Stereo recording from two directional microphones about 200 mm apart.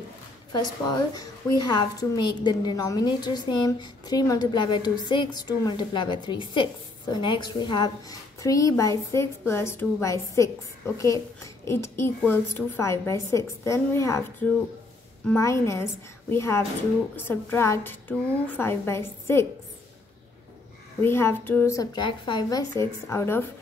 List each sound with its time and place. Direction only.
0.5 s a woman's voice: 20° left (ahead or behind)
15.2 s a woman's voice: 15° left (ahead or behind)
21.0 s a woman's voice: 10° left (ahead or behind)